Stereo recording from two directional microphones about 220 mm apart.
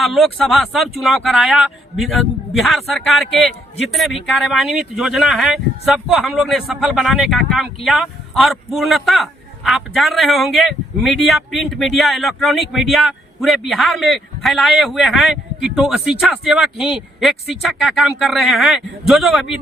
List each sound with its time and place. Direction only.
0.0 s a man's voice: centre (ahead or behind)